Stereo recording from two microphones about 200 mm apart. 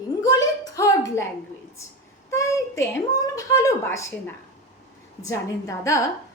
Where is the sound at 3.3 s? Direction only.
15° left (ahead or behind).